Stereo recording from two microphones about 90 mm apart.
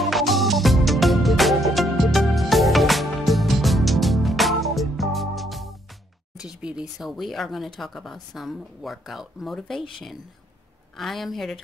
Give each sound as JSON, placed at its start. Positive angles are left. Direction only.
{"t": 0.0, "sound": "music", "side_deg": 0}
{"t": 6.4, "sound": "speech", "side_deg": -10}
{"t": 11.0, "sound": "speech", "side_deg": 0}